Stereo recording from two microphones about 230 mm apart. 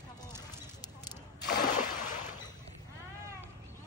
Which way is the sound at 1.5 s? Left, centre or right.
Left.